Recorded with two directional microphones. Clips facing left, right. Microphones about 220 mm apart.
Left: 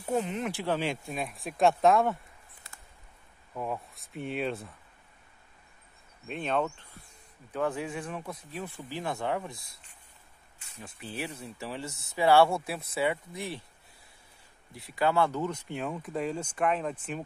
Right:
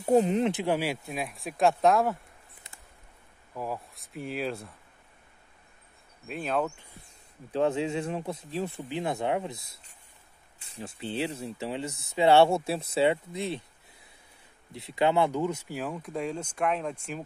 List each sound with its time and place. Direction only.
0.1 s speech: 35° right (ahead or behind)
0.5 s speech: 20° right (ahead or behind)
0.7 s speech: 5° right (ahead or behind)
3.5 s speech: centre (ahead or behind)
6.2 s speech: 5° right (ahead or behind)
7.5 s speech: 25° right (ahead or behind)
10.6 s speech: 30° right (ahead or behind)
14.7 s speech: 25° right (ahead or behind); by 16.9 s centre (ahead or behind)